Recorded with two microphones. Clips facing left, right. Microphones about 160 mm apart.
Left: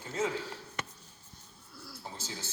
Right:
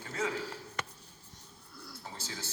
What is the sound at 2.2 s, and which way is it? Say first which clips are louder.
Speech: even; 20° left (ahead or behind).